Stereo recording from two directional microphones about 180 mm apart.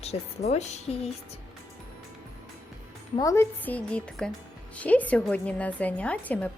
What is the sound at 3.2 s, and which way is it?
A woman's voice, 15° left (ahead or behind).